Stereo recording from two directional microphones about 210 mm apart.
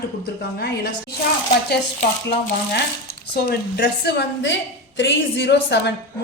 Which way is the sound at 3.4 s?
50° left (ahead or behind).